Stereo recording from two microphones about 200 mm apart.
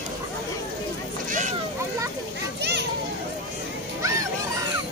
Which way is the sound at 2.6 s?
60° right (ahead or behind).